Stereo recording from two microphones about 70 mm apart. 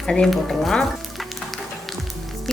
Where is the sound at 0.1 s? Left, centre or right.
Centre.